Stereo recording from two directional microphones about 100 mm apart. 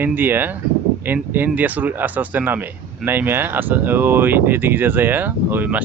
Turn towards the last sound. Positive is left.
turn(degrees=-20)  # may be behind; listen again after turning